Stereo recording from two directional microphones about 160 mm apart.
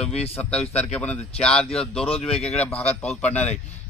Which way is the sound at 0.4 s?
10° left (ahead or behind).